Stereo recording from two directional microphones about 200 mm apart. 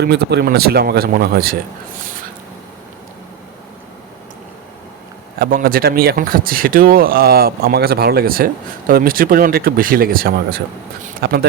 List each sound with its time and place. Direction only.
0.0 s speech: 55° right (ahead or behind)
5.4 s speech: 45° right (ahead or behind)